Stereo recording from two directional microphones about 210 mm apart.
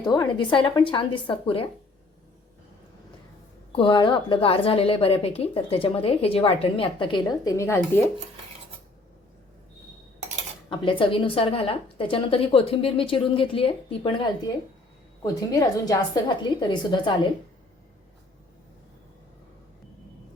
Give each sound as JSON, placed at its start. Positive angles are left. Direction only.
{"t": 0.0, "sound": "a woman's voice", "side_deg": 20}
{"t": 3.7, "sound": "a woman's voice", "side_deg": 20}
{"t": 10.7, "sound": "a woman's voice", "side_deg": 25}